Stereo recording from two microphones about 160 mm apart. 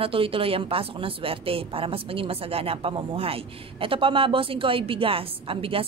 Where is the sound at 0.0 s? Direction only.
35° right (ahead or behind).